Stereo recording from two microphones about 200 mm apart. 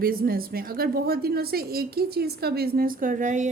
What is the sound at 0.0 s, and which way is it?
A woman's voice, 45° right (ahead or behind).